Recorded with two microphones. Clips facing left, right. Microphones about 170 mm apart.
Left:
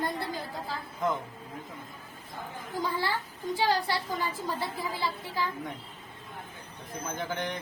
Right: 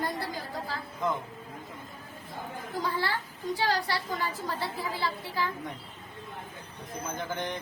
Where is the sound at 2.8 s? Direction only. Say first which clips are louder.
Left 1 dB; 15° left (ahead or behind).